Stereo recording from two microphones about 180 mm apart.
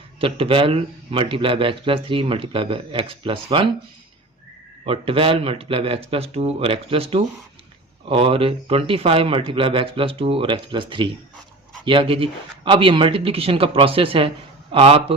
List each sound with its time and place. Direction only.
0.2 s speech: 30° right (ahead or behind)
4.9 s speech: 30° right (ahead or behind)